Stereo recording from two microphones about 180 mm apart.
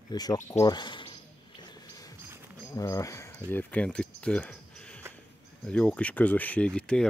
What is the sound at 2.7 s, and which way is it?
Speech, 20° left (ahead or behind).